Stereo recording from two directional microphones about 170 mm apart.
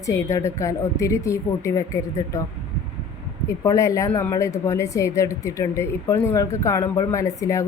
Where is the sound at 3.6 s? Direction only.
20° left (ahead or behind).